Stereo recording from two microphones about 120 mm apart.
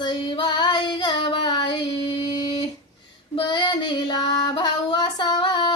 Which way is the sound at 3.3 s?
40° left (ahead or behind).